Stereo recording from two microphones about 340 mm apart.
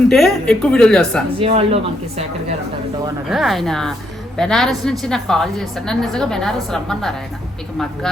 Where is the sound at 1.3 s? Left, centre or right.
Centre.